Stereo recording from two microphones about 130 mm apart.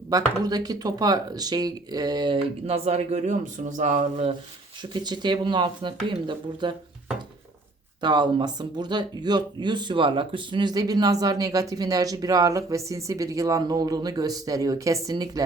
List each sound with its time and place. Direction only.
0.1 s speech: 30° right (ahead or behind)
2.6 s a man's voice: 50° right (ahead or behind); by 3.9 s 75° right (ahead or behind)
4.8 s speech: 35° right (ahead or behind)
8.0 s speech: 35° right (ahead or behind)